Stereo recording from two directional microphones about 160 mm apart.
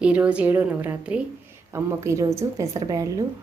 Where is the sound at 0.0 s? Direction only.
10° right (ahead or behind).